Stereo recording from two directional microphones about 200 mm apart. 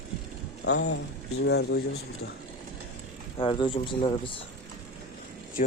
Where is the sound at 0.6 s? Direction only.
60° left (ahead or behind).